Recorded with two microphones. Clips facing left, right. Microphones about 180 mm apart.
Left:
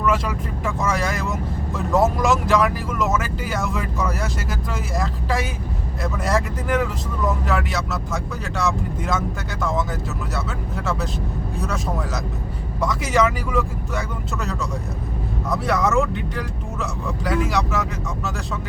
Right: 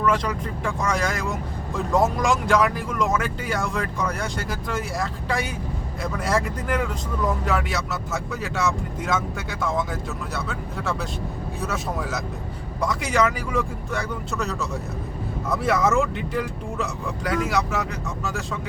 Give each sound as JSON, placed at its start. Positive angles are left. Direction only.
{"t": 0.0, "sound": "speech", "side_deg": 5}